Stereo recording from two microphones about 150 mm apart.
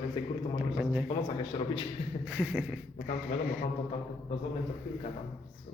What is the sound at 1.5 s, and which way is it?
Speech, 35° left (ahead or behind).